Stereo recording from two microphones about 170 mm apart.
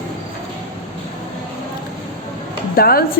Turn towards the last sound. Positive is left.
turn(degrees=60)  # may be behind; listen again after turning